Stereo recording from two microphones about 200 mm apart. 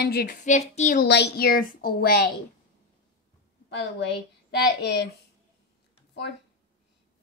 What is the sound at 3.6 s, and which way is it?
A woman's voice, 60° left (ahead or behind).